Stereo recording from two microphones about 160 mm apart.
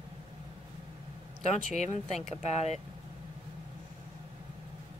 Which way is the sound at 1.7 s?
45° left (ahead or behind).